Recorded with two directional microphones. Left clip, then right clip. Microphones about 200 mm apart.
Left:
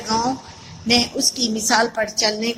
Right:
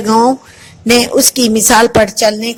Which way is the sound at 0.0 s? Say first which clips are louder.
Right 11 dB; 40° right (ahead or behind).